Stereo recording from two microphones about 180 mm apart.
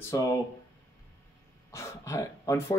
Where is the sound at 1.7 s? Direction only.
15° left (ahead or behind).